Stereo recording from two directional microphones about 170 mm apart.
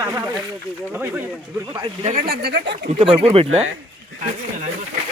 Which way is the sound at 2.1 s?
65° right (ahead or behind).